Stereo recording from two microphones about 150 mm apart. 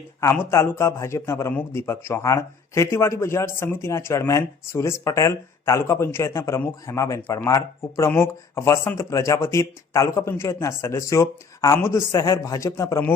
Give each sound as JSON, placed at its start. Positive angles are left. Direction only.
{"t": 0.2, "sound": "a man's voice", "side_deg": 15}